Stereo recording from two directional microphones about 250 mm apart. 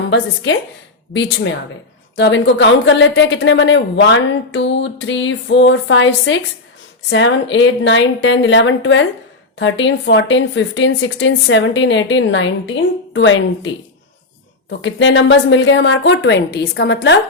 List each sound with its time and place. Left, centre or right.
0.0 s a woman's voice: left
14.8 s a woman's voice: left